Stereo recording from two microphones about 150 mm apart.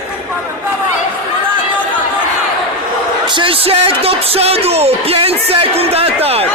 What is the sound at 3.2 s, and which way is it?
Speech, 35° right (ahead or behind).